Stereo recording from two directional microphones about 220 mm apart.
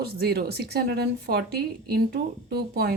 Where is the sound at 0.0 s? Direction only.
45° right (ahead or behind).